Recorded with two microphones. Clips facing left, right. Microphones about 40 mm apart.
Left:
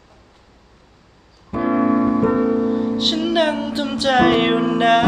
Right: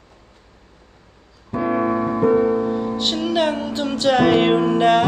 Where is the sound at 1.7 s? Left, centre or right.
Centre.